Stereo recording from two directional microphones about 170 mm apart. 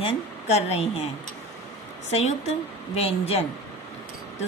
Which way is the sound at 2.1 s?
40° left (ahead or behind).